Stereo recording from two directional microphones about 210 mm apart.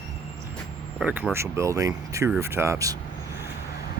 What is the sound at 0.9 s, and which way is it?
Speech, 5° right (ahead or behind).